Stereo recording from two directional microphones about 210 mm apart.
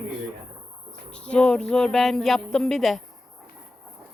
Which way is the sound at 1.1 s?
5° left (ahead or behind).